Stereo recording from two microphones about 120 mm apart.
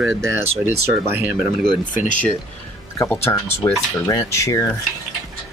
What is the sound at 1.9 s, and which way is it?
Speech, 90° left.